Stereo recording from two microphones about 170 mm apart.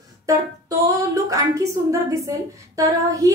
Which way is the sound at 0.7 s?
20° right (ahead or behind).